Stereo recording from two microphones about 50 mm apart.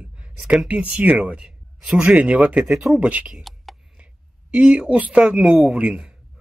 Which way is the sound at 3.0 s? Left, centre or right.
Right.